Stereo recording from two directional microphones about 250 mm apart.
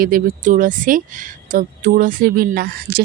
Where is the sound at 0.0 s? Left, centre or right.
Right.